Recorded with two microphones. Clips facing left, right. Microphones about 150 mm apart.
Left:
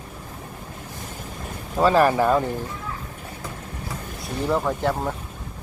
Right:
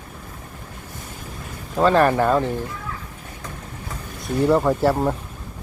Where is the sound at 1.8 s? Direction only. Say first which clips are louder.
Right 1 dB; 5° left (ahead or behind).